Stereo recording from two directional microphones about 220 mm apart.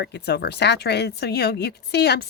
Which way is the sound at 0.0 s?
50° left (ahead or behind).